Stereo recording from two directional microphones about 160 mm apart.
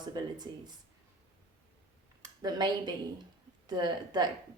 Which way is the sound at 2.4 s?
25° right (ahead or behind).